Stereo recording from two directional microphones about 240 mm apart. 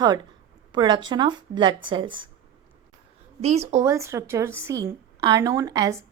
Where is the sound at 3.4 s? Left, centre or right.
Right.